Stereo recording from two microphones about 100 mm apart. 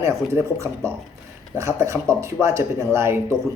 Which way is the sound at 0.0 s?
30° right (ahead or behind).